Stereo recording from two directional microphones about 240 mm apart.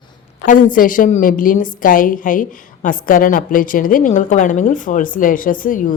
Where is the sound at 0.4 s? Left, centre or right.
Left.